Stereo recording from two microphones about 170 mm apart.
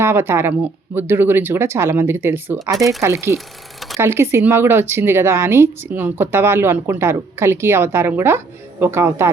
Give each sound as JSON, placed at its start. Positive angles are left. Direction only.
{"t": 0.0, "sound": "speech", "side_deg": -15}
{"t": 3.3, "sound": "a sound", "side_deg": 0}
{"t": 3.9, "sound": "speech", "side_deg": -15}